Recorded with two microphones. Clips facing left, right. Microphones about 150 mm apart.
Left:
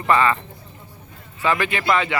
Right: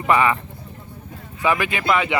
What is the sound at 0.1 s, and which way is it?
Speech, 15° right (ahead or behind).